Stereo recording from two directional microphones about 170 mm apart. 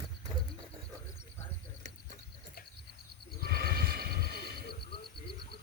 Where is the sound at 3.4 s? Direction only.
65° right (ahead or behind).